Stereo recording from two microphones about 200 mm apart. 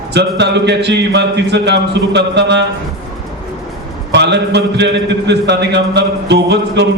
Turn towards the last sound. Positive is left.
turn(degrees=-60)  # may be behind; listen again after turning